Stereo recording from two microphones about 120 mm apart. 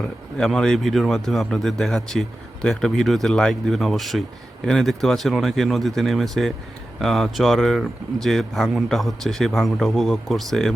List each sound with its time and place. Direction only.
0.3 s speech: 5° left (ahead or behind)